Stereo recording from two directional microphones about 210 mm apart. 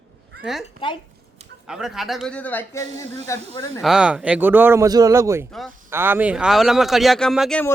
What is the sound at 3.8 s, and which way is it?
Speech, 5° right (ahead or behind).